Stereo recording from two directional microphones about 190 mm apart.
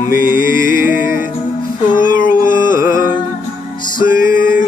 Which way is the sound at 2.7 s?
15° right (ahead or behind).